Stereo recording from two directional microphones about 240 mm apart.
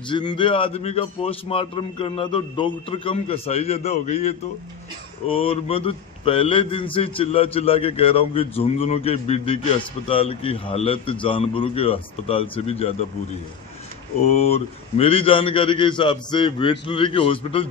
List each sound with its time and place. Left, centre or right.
0.1 s a man's voice: centre